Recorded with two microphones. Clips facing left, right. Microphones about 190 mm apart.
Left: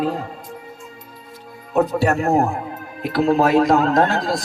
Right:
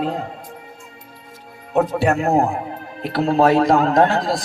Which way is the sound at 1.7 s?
15° right (ahead or behind).